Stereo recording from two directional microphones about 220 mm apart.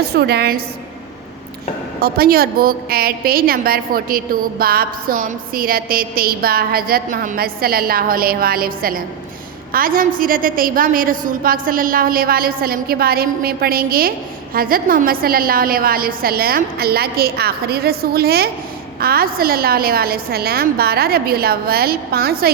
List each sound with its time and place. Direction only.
0.0 s a woman's voice: 45° right (ahead or behind)
2.0 s a woman's voice: 45° right (ahead or behind)